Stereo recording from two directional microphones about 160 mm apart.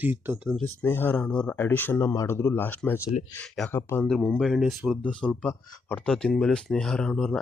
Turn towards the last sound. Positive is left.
turn(degrees=5)  # may be behind; listen again after turning